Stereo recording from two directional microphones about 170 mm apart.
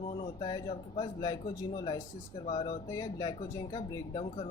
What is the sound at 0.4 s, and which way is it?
Speech, 25° left (ahead or behind).